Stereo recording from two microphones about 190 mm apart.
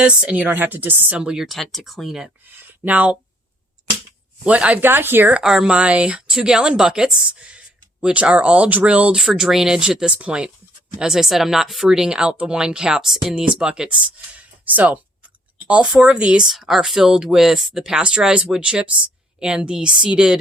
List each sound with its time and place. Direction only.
0.0 s speech: 5° right (ahead or behind)
4.4 s speech: 5° right (ahead or behind)